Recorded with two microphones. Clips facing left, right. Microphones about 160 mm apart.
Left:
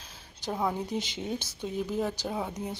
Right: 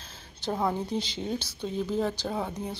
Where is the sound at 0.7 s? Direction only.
15° left (ahead or behind).